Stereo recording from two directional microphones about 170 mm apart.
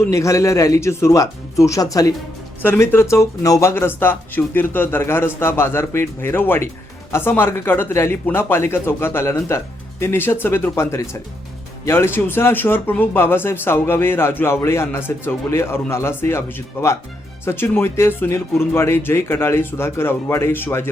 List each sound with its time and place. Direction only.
0.0 s speech: 20° left (ahead or behind)